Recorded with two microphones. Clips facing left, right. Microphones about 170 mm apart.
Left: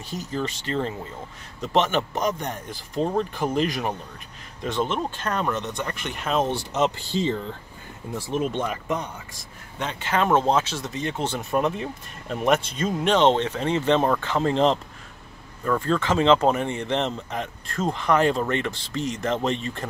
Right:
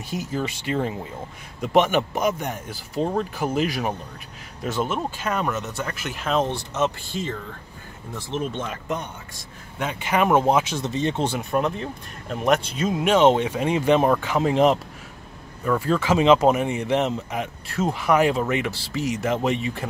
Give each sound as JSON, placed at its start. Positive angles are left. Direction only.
{"t": 0.1, "sound": "a man's voice", "side_deg": -10}
{"t": 6.7, "sound": "speech", "side_deg": 20}
{"t": 8.1, "sound": "speech", "side_deg": 10}
{"t": 9.8, "sound": "a man's voice", "side_deg": -10}
{"t": 10.9, "sound": "speech", "side_deg": -25}
{"t": 11.2, "sound": "a man's voice", "side_deg": -5}